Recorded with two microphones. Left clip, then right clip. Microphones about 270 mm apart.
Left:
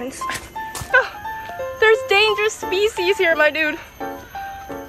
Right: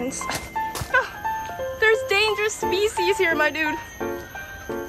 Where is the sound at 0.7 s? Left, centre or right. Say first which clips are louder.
Left 6 dB; centre.